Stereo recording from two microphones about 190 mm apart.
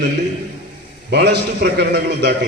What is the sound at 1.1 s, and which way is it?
A man's voice, 60° right (ahead or behind).